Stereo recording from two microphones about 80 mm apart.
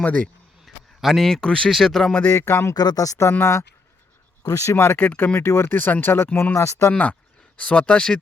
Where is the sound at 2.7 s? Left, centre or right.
Left.